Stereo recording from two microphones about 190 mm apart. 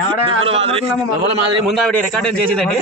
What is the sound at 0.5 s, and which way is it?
Speech, 30° right (ahead or behind).